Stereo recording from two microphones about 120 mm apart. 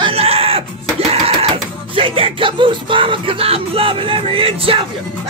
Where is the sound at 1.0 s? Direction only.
50° right (ahead or behind).